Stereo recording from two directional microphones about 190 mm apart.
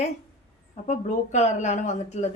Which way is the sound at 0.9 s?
40° left (ahead or behind).